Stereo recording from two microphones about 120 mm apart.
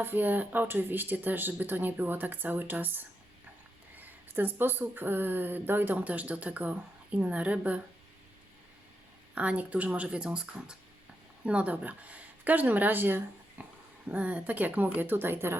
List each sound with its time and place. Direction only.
0.0 s speech: 15° right (ahead or behind)
9.3 s speech: 10° right (ahead or behind)